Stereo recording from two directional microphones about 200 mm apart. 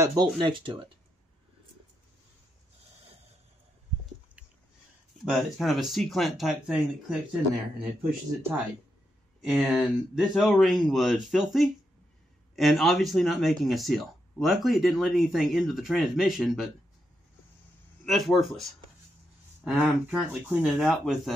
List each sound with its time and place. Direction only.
0.0 s speech: 20° right (ahead or behind)
5.2 s speech: centre (ahead or behind)
9.4 s speech: centre (ahead or behind)
18.0 s speech: centre (ahead or behind)